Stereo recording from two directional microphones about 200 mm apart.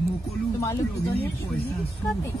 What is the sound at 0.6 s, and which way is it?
Speech, 15° left (ahead or behind).